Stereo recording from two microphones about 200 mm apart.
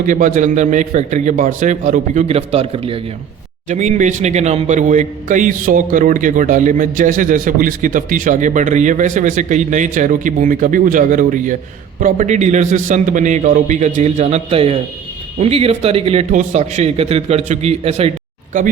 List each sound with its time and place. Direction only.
0.1 s speech: 40° right (ahead or behind)